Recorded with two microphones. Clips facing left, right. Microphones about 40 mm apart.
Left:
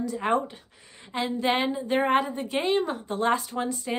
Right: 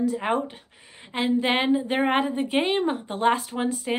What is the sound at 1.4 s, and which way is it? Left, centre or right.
Speech, right.